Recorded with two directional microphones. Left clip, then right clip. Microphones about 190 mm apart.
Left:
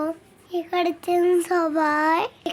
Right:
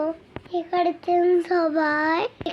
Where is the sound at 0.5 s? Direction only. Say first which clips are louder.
Right 1 dB; 30° left (ahead or behind).